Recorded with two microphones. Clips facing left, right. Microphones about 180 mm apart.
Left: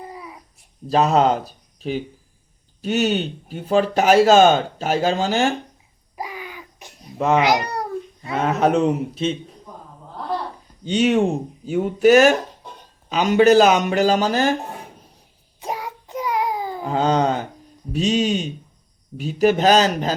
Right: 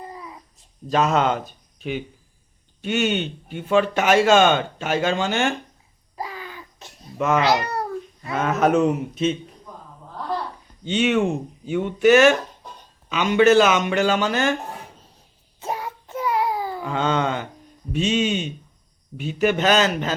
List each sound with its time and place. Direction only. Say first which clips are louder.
0.1 s babbling: left 1 dB; 15° left (ahead or behind)
0.9 s speech: left 3 dB; 35° left (ahead or behind)
6.1 s a sound: left 1 dB; 15° left (ahead or behind)
7.3 s speech: left 1 dB; 15° left (ahead or behind)
8.2 s speech: left 1 dB; 30° left (ahead or behind)
10.8 s speech: left 2 dB; 40° left (ahead or behind)
15.6 s a sound: even; 15° left (ahead or behind)
16.8 s speech: left 5 dB; 40° left (ahead or behind)